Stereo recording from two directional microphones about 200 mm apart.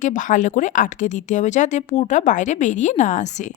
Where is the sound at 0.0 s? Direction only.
40° left (ahead or behind).